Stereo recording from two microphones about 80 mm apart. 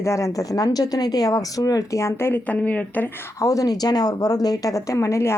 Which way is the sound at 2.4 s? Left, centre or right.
Centre.